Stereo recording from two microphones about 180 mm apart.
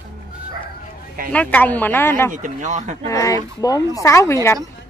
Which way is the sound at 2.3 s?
45° right (ahead or behind).